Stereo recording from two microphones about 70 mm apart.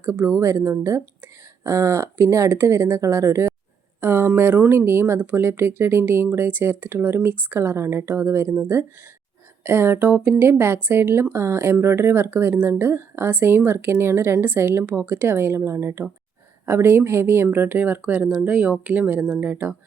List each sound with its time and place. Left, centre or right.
0.0 s speech: right
4.0 s a sound: right
4.4 s speech: right
9.6 s speech: right